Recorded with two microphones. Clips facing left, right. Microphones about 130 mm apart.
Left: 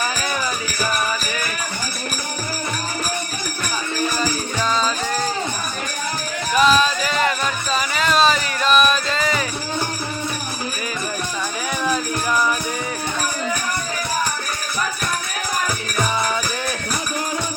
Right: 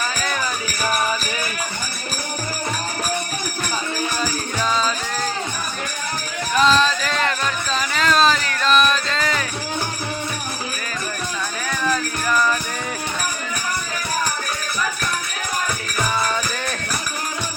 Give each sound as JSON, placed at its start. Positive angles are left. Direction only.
{"t": 6.5, "sound": "music", "side_deg": 5}
{"t": 11.8, "sound": "music", "side_deg": 15}